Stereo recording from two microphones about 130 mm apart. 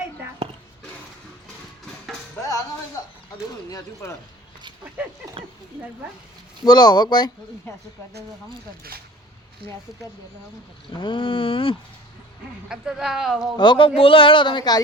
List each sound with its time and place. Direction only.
3.3 s speech: 25° left (ahead or behind)
6.7 s a man's voice: 35° left (ahead or behind)
10.9 s a man's voice: 40° left (ahead or behind)
12.6 s speech: 5° right (ahead or behind)
13.6 s a man's voice: 40° left (ahead or behind)